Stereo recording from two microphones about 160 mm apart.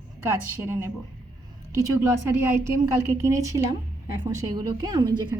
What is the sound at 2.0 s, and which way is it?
A woman's voice, 15° right (ahead or behind).